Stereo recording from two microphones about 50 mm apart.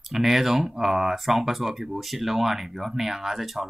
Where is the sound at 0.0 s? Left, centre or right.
Centre.